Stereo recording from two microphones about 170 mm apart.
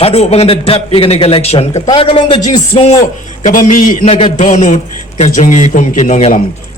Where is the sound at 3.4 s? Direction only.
50° left (ahead or behind).